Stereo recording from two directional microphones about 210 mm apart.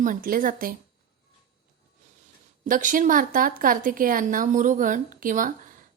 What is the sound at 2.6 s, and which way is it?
A woman's voice, 40° right (ahead or behind).